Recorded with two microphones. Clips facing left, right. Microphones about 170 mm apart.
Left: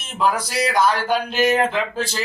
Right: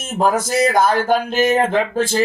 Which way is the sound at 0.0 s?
45° right (ahead or behind).